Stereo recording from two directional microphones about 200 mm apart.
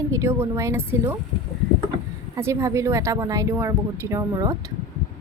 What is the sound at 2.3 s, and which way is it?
Speech, 15° right (ahead or behind).